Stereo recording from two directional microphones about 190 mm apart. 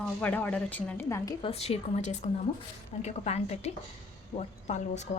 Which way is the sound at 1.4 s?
35° left (ahead or behind).